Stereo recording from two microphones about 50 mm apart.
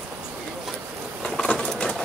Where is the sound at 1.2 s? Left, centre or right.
Centre.